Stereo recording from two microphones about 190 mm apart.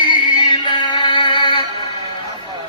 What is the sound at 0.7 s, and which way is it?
Synthetic singing, 25° left (ahead or behind).